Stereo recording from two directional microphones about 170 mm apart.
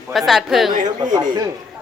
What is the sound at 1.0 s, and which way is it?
Speech, 25° right (ahead or behind).